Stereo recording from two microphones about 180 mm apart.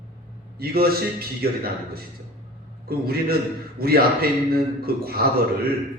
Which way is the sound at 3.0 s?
55° right (ahead or behind).